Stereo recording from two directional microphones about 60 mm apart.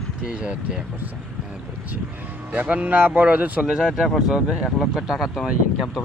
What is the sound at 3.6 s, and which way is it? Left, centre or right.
Speech, centre.